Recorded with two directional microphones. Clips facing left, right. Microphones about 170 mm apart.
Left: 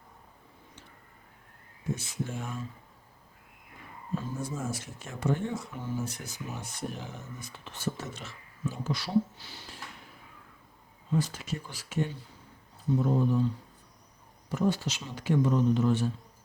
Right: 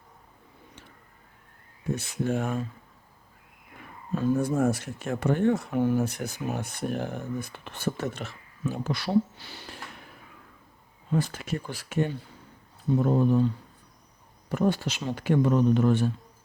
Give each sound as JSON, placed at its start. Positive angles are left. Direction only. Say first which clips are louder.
{"t": 2.0, "sound": "speech", "louder": "right 8 dB", "side_deg": -65}
{"t": 4.1, "sound": "speech", "louder": "right 10 dB", "side_deg": -65}
{"t": 11.1, "sound": "speech", "louder": "right 3 dB", "side_deg": -55}
{"t": 14.5, "sound": "speech", "louder": "right 3 dB", "side_deg": -60}